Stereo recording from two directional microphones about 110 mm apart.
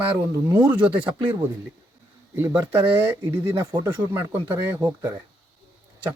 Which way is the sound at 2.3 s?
20° right (ahead or behind).